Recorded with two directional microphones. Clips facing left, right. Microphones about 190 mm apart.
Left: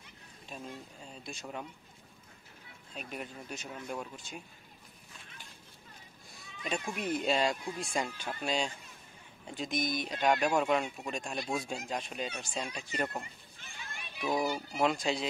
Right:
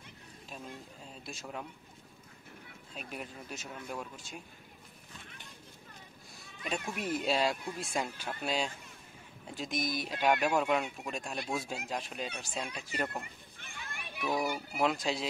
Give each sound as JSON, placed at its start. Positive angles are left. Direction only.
{"t": 1.0, "sound": "speech", "side_deg": 0}
{"t": 2.9, "sound": "speech", "side_deg": 0}
{"t": 6.6, "sound": "speech", "side_deg": 0}
{"t": 13.6, "sound": "children playing", "side_deg": -55}
{"t": 14.7, "sound": "speech", "side_deg": 0}